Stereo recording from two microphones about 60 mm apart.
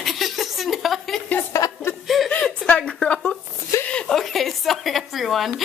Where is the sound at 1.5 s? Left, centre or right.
Left.